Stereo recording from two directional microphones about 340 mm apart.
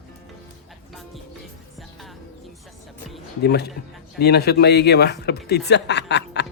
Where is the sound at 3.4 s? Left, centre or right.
Left.